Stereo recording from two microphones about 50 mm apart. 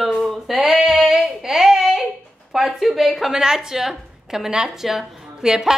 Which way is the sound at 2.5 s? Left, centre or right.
Centre.